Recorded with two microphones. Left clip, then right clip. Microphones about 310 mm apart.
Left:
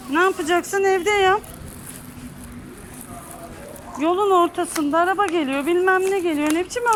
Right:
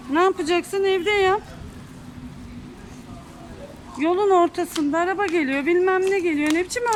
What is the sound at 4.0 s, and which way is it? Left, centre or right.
Speech, centre.